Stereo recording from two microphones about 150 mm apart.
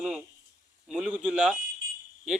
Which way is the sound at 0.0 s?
5° right (ahead or behind).